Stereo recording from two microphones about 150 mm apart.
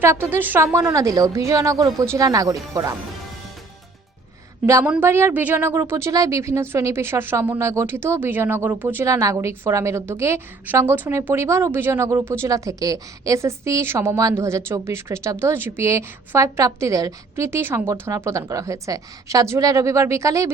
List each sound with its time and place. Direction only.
0.0 s speech: 15° right (ahead or behind)
4.6 s a woman's voice: 20° right (ahead or behind)